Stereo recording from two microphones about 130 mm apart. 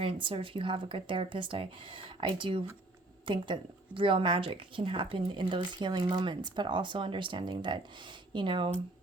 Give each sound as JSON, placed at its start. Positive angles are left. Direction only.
{"t": 0.0, "sound": "speech", "side_deg": -45}